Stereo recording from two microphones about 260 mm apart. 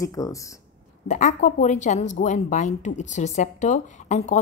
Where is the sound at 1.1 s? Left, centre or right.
Left.